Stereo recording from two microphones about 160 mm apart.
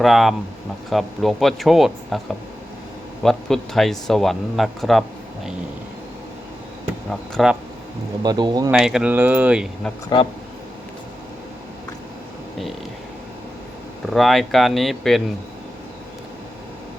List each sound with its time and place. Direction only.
0.0 s speech: centre (ahead or behind)
3.2 s speech: centre (ahead or behind)
7.1 s speech: centre (ahead or behind)
8.2 s speech: 25° right (ahead or behind)
8.7 s speech: 5° right (ahead or behind)
10.1 s speech: 30° left (ahead or behind)
14.1 s speech: centre (ahead or behind)